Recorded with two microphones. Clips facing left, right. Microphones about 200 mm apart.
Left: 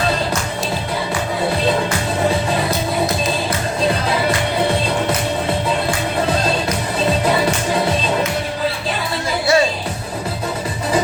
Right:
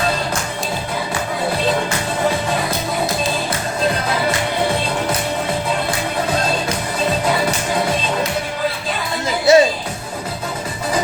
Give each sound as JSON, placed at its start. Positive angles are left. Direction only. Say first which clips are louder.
{"t": 9.5, "sound": "music", "louder": "right 5 dB", "side_deg": -20}